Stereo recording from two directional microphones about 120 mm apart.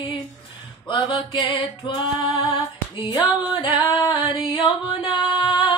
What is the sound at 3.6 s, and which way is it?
Female singing, 35° left (ahead or behind).